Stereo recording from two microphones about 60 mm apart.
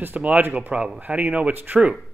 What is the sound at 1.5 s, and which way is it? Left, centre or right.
Speech, right.